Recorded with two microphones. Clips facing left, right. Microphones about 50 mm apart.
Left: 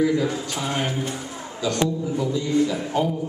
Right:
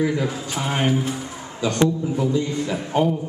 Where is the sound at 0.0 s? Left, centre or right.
Right.